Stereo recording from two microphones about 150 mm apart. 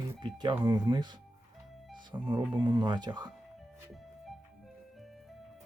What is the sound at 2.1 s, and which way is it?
Speech, 30° right (ahead or behind).